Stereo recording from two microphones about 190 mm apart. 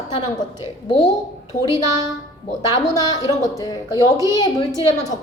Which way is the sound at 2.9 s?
20° left (ahead or behind).